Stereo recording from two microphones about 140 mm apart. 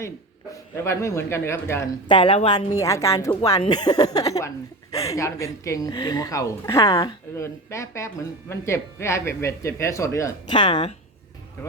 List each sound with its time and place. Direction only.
0.5 s speech: 20° left (ahead or behind)
2.0 s a woman's voice: 35° left (ahead or behind)
2.8 s speech: 20° left (ahead or behind)
10.5 s a woman's voice: 35° left (ahead or behind)
11.6 s speech: 15° left (ahead or behind)